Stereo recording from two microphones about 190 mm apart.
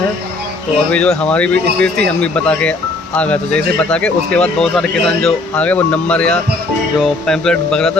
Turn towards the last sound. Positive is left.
turn(degrees=5)  # may be behind; listen again after turning